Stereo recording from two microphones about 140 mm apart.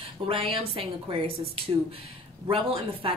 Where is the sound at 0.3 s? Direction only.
40° right (ahead or behind).